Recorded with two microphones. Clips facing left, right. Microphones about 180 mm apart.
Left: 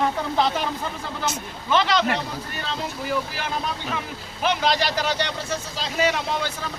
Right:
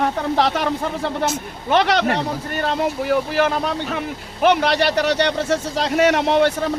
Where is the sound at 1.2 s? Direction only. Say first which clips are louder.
Right 6 dB; 55° right (ahead or behind).